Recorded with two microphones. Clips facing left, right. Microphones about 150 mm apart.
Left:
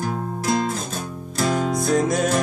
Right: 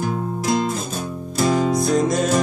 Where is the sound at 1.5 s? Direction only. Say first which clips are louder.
Right 2 dB; 5° left (ahead or behind).